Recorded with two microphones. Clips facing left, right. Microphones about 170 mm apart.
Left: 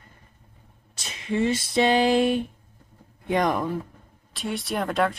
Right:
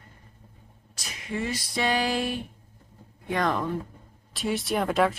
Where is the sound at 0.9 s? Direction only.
25° left (ahead or behind).